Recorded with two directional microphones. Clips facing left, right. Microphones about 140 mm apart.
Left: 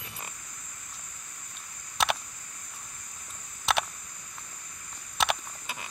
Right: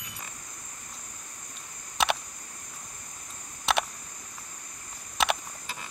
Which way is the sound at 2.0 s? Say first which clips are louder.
Right 1 dB; centre (ahead or behind).